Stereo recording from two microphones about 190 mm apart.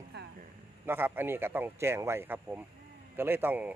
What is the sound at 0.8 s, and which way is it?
Speech, 10° right (ahead or behind).